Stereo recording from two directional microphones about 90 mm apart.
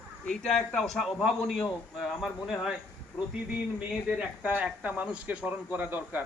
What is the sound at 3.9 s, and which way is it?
Speech, 10° right (ahead or behind).